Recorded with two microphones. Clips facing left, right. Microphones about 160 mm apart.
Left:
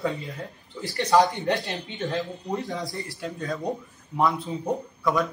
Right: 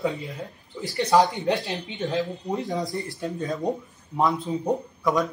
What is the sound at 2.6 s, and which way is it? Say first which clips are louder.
Speech: right 4 dB; 20° right (ahead or behind).